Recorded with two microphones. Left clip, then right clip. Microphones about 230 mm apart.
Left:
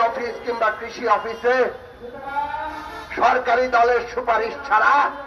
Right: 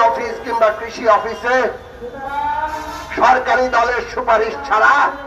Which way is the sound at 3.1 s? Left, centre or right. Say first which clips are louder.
Right 5 dB; left.